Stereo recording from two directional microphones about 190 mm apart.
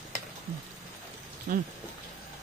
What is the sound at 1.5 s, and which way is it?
Speech, 45° right (ahead or behind).